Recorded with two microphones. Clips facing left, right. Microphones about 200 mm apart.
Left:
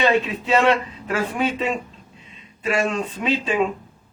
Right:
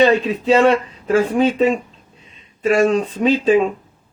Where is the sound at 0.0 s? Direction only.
40° right (ahead or behind).